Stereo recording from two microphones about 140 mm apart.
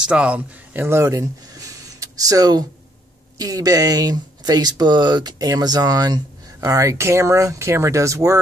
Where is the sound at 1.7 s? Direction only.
25° right (ahead or behind).